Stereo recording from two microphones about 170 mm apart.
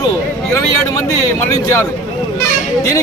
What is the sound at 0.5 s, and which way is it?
Speech, 20° left (ahead or behind).